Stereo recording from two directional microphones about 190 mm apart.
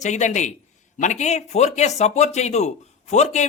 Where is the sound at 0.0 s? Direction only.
40° left (ahead or behind).